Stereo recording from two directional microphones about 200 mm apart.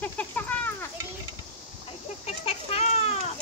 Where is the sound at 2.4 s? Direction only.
30° left (ahead or behind).